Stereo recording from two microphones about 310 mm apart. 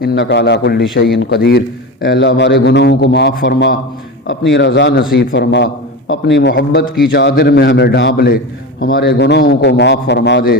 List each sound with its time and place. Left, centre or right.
0.0 s a man's voice: left